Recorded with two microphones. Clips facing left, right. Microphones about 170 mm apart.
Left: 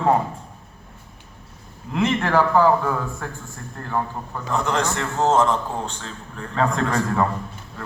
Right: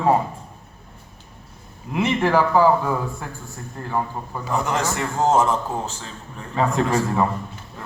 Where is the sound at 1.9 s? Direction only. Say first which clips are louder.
Right 1 dB; 10° right (ahead or behind).